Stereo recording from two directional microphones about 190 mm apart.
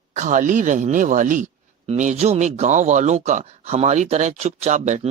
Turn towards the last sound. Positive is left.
turn(degrees=-35)  # may be behind; listen again after turning